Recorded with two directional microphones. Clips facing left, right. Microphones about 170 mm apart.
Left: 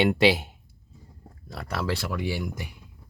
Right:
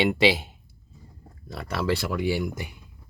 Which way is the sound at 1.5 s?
Centre (ahead or behind).